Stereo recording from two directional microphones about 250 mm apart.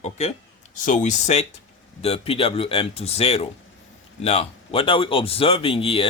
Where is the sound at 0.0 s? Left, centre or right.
Left.